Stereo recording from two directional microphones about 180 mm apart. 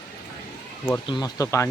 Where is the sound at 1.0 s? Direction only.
25° left (ahead or behind).